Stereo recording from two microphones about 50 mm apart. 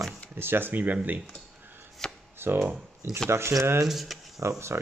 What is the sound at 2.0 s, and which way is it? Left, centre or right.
Chopping, centre.